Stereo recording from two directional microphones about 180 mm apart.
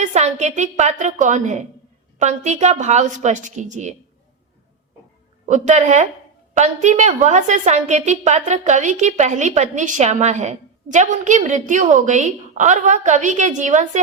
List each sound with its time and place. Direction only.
0.0 s a woman's voice: 40° right (ahead or behind)
5.5 s a woman's voice: 45° right (ahead or behind)